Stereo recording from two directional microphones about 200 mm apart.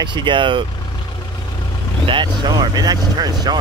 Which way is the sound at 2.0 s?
25° right (ahead or behind).